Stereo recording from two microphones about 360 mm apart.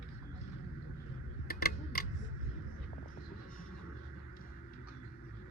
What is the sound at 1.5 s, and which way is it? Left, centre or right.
Tick-tock, left.